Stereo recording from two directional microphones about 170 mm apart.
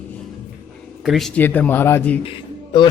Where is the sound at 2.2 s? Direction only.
25° left (ahead or behind).